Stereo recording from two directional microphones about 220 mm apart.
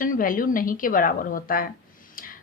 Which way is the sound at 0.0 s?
40° left (ahead or behind).